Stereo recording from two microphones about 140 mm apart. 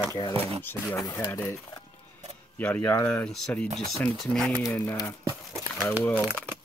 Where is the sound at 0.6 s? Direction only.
15° left (ahead or behind).